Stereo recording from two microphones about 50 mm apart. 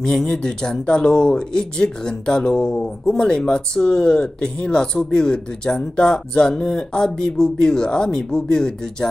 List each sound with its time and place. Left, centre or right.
0.0 s speech: centre